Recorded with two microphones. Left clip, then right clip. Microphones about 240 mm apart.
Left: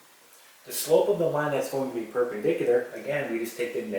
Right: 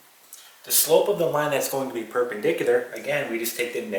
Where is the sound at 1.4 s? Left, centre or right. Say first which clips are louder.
Right 3 dB; centre.